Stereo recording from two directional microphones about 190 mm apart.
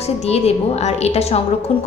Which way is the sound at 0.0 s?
35° left (ahead or behind).